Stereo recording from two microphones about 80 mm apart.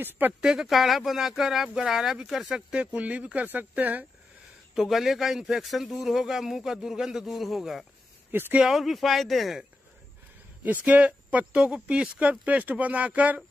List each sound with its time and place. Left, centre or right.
0.4 s speech: centre
2.7 s speech: centre
4.7 s speech: centre
8.3 s speech: right
8.5 s speech: centre
10.6 s speech: centre